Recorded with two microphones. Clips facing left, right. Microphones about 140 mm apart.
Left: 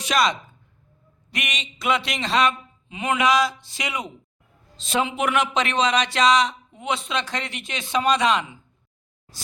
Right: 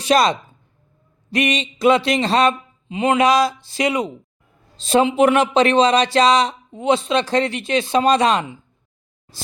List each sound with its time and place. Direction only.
0.0 s speech: 35° right (ahead or behind)